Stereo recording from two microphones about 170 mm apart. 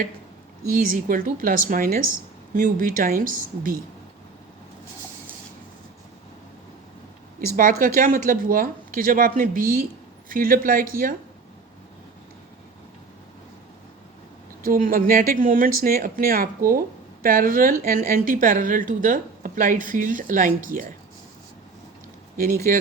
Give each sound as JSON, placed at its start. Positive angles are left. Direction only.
{"t": 0.8, "sound": "speech", "side_deg": -55}
{"t": 7.4, "sound": "speech", "side_deg": -55}
{"t": 14.6, "sound": "a woman's voice", "side_deg": -55}
{"t": 22.4, "sound": "speech", "side_deg": -60}